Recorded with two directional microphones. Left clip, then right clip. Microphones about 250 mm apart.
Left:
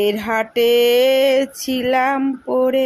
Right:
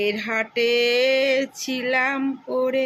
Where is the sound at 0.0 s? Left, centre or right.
Left.